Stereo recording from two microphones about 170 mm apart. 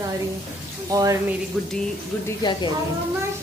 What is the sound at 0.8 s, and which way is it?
Speech, 20° right (ahead or behind).